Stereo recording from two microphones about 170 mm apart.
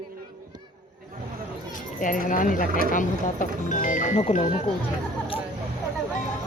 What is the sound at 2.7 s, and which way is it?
Speech, 55° right (ahead or behind).